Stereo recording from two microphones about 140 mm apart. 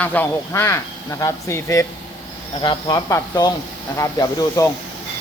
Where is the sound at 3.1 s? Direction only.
25° left (ahead or behind).